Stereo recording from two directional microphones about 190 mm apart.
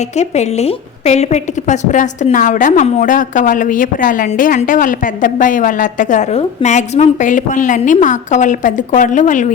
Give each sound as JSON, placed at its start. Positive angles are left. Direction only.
{"t": 0.2, "sound": "a woman's voice", "side_deg": 35}